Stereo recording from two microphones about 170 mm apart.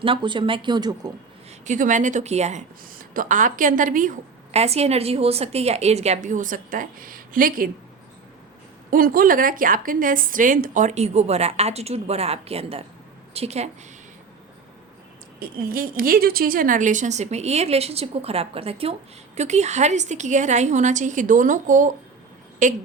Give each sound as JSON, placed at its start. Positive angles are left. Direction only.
{"t": 0.0, "sound": "speech", "side_deg": -30}
{"t": 1.5, "sound": "a woman's voice", "side_deg": -45}
{"t": 4.5, "sound": "a woman's voice", "side_deg": -40}
{"t": 8.9, "sound": "a woman's voice", "side_deg": -55}
{"t": 15.4, "sound": "a woman's voice", "side_deg": -60}